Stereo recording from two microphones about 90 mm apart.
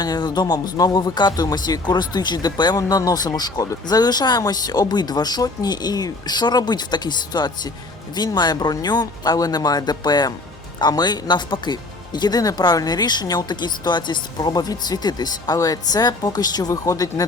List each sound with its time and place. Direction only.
0.0 s speech: 50° left (ahead or behind)